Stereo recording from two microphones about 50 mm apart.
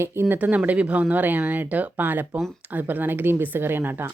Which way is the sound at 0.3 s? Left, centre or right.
Right.